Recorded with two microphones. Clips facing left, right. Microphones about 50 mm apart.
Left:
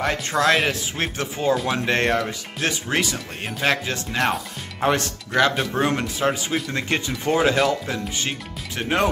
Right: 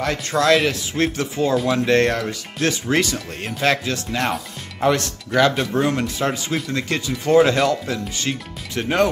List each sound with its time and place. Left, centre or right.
0.0 s speech: centre
1.5 s speech: centre
4.2 s speech: centre
6.7 s speech: left
7.2 s speech: centre
7.9 s speech: centre